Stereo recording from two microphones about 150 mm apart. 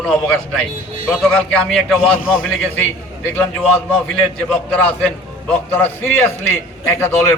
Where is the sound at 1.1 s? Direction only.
5° left (ahead or behind).